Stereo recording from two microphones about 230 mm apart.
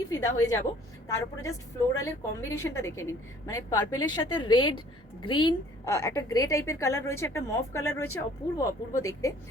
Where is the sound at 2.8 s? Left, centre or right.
Centre.